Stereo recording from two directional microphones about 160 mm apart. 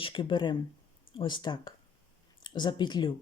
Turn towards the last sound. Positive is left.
turn(degrees=30)  # may be behind; listen again after turning